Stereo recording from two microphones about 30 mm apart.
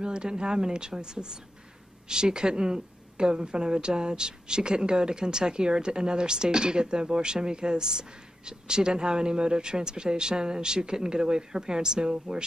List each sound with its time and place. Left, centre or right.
0.0 s a woman's voice: right